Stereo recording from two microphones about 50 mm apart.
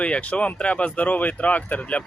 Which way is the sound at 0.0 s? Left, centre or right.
Left.